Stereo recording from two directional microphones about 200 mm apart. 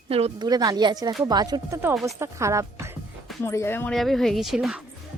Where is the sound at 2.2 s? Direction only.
15° right (ahead or behind).